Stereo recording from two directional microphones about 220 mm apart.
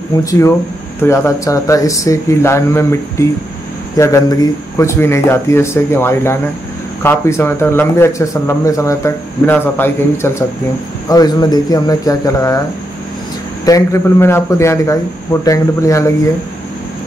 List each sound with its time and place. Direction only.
0.2 s a man's voice: 15° left (ahead or behind)
13.7 s a man's voice: 15° left (ahead or behind)